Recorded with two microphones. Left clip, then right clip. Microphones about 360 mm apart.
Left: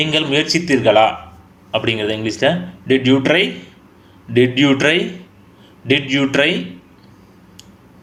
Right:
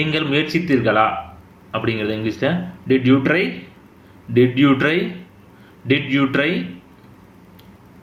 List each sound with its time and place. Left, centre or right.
0.1 s a man's voice: centre